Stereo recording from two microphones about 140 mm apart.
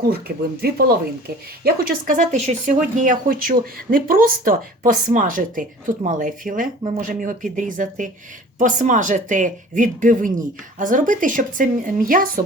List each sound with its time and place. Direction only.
0.1 s speech: 90° right